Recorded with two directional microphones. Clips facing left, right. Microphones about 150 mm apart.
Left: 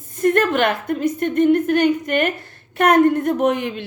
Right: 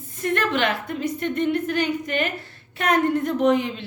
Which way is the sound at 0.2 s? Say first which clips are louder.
Left 6 dB; 45° left (ahead or behind).